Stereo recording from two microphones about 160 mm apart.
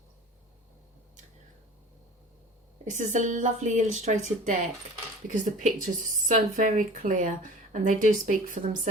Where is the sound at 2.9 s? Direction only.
50° right (ahead or behind).